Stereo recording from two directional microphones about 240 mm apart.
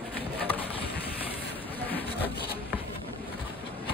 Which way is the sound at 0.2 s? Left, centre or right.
Left.